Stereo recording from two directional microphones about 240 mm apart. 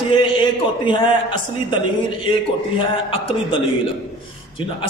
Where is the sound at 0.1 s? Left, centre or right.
Centre.